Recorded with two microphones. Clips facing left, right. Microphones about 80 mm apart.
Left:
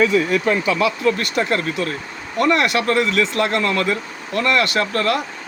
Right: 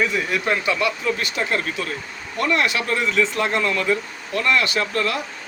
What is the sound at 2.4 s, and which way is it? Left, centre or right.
Speech, left.